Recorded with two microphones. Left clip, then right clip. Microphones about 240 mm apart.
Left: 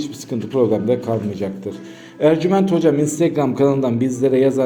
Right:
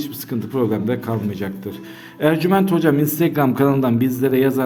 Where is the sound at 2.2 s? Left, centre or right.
Right.